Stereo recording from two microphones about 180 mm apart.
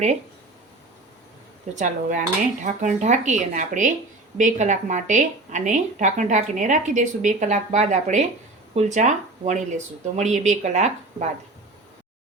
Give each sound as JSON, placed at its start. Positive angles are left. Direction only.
{"t": 1.7, "sound": "a woman's voice", "side_deg": -45}